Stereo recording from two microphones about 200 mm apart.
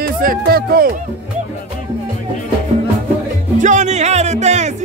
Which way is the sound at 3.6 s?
35° right (ahead or behind).